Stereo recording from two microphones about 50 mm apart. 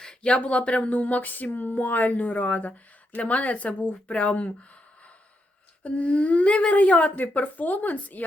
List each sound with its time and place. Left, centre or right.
0.0 s speech: centre
5.8 s speech: left